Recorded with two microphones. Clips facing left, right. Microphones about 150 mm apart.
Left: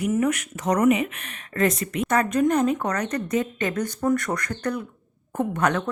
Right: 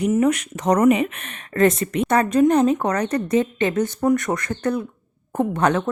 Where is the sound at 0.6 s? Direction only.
40° right (ahead or behind).